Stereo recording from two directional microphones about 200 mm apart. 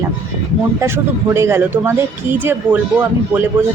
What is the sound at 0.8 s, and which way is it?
Speech, 10° right (ahead or behind).